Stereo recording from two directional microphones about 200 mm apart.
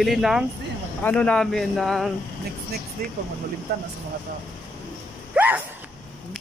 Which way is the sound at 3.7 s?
55° right (ahead or behind).